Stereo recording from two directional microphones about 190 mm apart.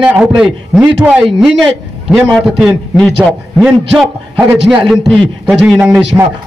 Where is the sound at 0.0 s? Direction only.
5° right (ahead or behind).